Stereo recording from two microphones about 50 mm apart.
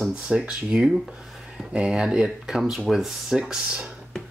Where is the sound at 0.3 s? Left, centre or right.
Centre.